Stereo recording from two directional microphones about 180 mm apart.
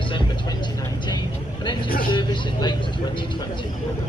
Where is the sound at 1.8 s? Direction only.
55° left (ahead or behind).